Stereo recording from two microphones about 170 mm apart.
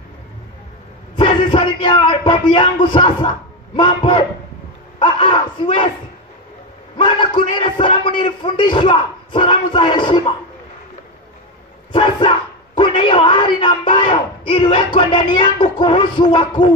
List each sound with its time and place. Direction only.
1.1 s speech: 25° left (ahead or behind)
7.0 s speech: 25° left (ahead or behind)
11.9 s speech: 30° left (ahead or behind)